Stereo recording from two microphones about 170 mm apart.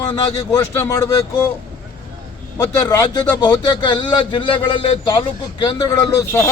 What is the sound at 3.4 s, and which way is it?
A man's voice, 25° left (ahead or behind).